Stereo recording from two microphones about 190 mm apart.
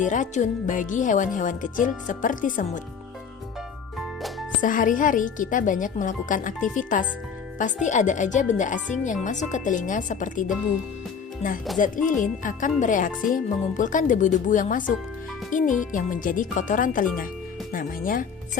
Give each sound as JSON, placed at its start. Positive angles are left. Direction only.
{"t": 0.0, "sound": "speech", "side_deg": 40}
{"t": 3.9, "sound": "music", "side_deg": 0}
{"t": 4.6, "sound": "speech", "side_deg": 45}
{"t": 11.8, "sound": "speech", "side_deg": 45}